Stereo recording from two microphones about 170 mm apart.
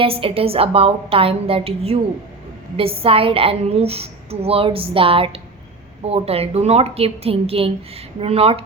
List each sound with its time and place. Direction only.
0.0 s a woman's voice: 35° right (ahead or behind)